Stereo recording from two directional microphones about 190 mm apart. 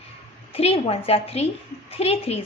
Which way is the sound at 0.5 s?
30° left (ahead or behind).